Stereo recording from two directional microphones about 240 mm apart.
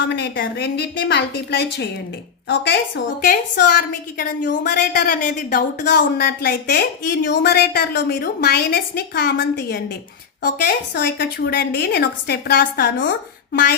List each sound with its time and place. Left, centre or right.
0.0 s a woman's voice: left
5.8 s a woman's voice: left